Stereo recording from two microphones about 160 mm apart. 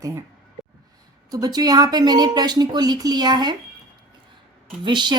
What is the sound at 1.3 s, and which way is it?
A woman's voice, 25° right (ahead or behind).